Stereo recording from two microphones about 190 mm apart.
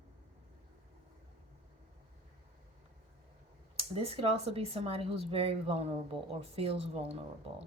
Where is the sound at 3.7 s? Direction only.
30° right (ahead or behind).